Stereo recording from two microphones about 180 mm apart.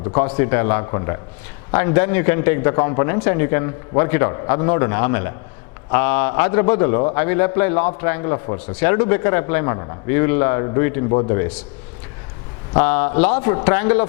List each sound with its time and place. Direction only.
0.3 s a man's voice: 15° left (ahead or behind)
11.1 s a man's voice: 30° left (ahead or behind)
11.3 s a man's voice: 10° left (ahead or behind)
12.8 s a man's voice: 15° left (ahead or behind)